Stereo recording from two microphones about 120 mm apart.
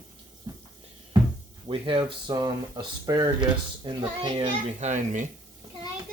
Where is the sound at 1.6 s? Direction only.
45° right (ahead or behind).